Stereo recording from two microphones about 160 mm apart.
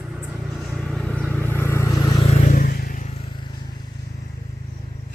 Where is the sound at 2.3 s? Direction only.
50° left (ahead or behind).